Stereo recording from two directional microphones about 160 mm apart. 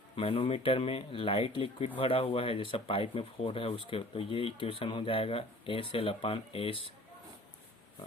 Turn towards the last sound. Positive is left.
turn(degrees=35)  # may be behind; listen again after turning